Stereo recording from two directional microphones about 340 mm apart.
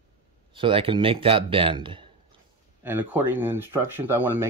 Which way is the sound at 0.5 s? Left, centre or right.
Centre.